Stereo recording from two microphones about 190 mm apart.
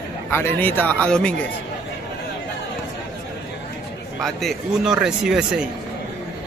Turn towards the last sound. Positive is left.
turn(degrees=-5)  # may be behind; listen again after turning